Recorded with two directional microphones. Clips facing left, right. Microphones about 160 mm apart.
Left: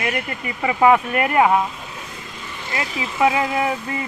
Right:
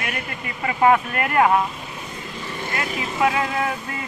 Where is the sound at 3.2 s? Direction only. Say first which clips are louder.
Left 3 dB; 20° left (ahead or behind).